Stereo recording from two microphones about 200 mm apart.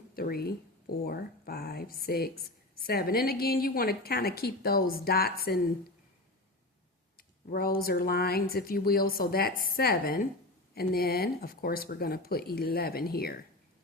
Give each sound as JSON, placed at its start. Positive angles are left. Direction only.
{"t": 0.1, "sound": "speech", "side_deg": 50}
{"t": 7.2, "sound": "speech", "side_deg": 50}